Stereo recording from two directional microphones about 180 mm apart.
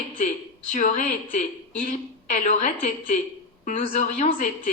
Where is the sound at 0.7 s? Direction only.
40° left (ahead or behind).